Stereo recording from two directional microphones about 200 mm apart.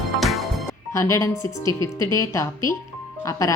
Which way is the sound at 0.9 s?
15° left (ahead or behind).